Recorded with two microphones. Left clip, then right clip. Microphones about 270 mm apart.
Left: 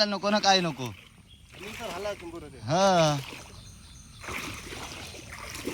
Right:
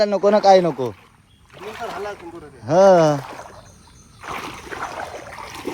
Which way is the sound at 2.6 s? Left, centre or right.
Centre.